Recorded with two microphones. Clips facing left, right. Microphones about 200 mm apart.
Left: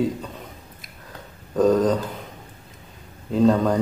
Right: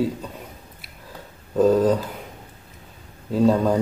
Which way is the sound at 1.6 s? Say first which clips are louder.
Right 1 dB; 5° right (ahead or behind).